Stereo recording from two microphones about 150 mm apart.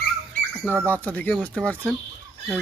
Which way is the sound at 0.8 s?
10° left (ahead or behind).